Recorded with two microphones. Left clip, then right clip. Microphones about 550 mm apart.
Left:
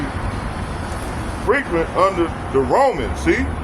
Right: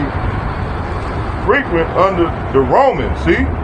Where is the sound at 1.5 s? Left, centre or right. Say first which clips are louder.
Right 5 dB; left.